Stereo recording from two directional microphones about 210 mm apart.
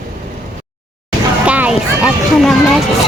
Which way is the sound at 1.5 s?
5° right (ahead or behind).